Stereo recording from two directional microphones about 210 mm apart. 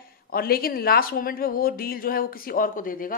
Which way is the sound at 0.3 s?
45° left (ahead or behind).